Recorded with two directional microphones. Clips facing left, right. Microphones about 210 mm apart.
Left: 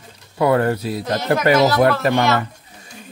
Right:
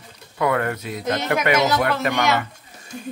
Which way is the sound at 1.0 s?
20° right (ahead or behind).